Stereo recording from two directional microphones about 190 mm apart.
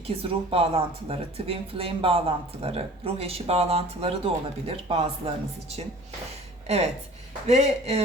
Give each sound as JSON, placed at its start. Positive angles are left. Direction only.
{"t": 0.2, "sound": "speech", "side_deg": -30}